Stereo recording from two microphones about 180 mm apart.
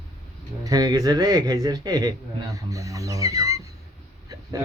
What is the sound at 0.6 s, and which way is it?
A man's voice, 20° right (ahead or behind).